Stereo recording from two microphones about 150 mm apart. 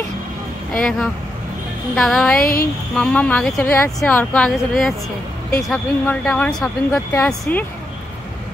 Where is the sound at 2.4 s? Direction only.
80° left.